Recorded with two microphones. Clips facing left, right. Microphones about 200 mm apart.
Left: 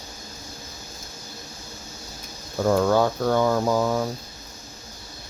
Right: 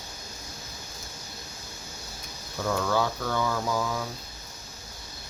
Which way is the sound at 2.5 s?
40° left (ahead or behind).